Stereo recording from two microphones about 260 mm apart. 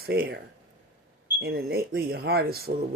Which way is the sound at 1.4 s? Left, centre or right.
Right.